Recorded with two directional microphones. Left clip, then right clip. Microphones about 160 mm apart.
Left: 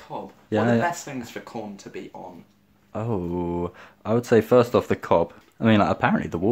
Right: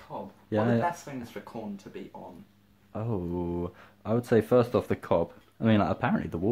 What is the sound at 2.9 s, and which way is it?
Speech, 10° left (ahead or behind).